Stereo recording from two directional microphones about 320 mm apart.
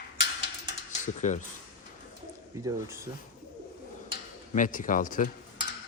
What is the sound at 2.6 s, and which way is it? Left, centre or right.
Speech, centre.